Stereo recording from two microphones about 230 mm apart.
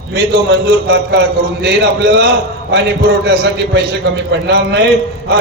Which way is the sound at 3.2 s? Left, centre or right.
Right.